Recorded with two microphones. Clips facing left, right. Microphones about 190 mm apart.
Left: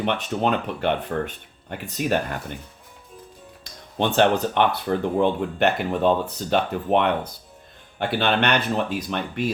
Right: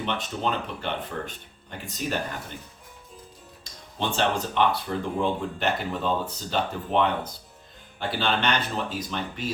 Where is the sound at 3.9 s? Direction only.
60° left (ahead or behind).